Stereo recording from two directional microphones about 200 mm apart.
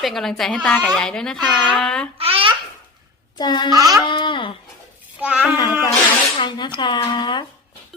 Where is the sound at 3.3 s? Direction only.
20° left (ahead or behind).